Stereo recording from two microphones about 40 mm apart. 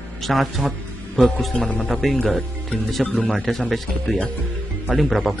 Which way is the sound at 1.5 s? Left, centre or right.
Left.